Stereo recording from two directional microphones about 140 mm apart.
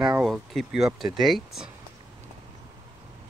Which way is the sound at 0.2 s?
Centre (ahead or behind).